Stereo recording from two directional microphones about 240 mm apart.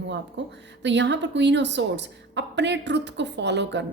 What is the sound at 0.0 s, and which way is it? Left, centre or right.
Speech, right.